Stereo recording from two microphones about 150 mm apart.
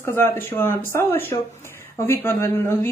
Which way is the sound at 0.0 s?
15° left (ahead or behind).